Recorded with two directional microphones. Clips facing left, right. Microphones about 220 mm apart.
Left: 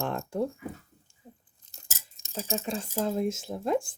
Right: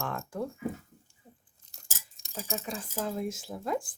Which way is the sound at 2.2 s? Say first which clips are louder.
Left 4 dB; 25° left (ahead or behind).